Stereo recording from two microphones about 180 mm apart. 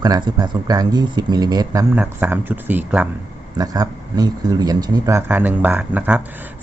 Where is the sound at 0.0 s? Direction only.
20° right (ahead or behind).